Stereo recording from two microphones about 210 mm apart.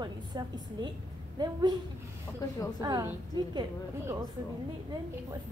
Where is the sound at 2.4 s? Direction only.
15° left (ahead or behind).